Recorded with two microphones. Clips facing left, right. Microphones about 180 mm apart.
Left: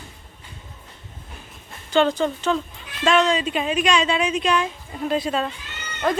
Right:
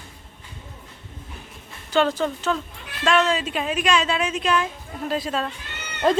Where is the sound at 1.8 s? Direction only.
5° right (ahead or behind).